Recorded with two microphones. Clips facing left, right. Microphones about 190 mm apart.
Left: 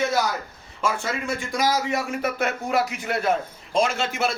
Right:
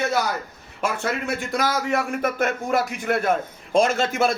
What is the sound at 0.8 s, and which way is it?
A man's voice, 60° right (ahead or behind).